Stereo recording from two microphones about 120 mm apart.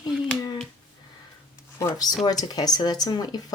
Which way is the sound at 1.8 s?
30° left (ahead or behind).